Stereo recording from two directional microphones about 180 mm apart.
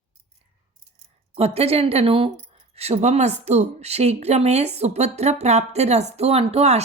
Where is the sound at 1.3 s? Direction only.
35° right (ahead or behind).